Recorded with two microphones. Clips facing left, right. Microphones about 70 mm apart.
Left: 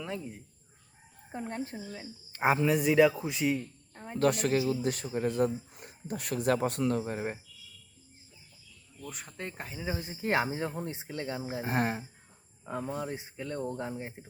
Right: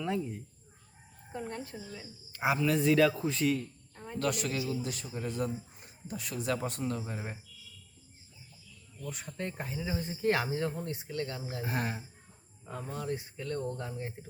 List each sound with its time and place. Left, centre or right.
0.0 s speech: centre
1.3 s a woman's voice: left
2.6 s speech: centre
4.2 s speech: left
5.7 s speech: left
9.0 s speech: centre
10.3 s speech: centre
11.6 s a woman's voice: left
12.6 s speech: centre